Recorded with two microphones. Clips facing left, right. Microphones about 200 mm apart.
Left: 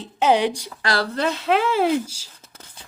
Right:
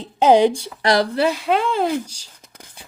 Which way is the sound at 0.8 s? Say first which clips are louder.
Right 6 dB; 20° right (ahead or behind).